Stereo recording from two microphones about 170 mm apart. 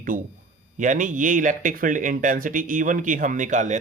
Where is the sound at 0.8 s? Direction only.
50° right (ahead or behind).